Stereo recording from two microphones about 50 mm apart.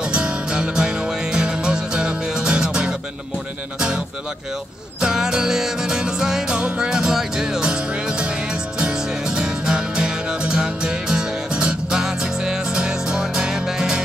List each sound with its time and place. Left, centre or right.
0.1 s music: centre
5.0 s music: centre